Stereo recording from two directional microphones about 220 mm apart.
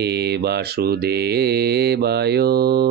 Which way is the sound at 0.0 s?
50° right (ahead or behind).